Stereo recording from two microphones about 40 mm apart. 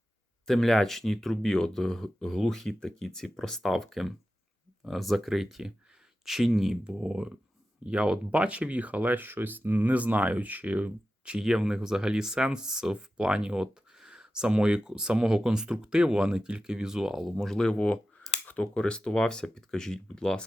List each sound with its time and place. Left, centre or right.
0.4 s speech: centre
6.8 s speech: right
11.4 s speech: centre
17.5 s speech: left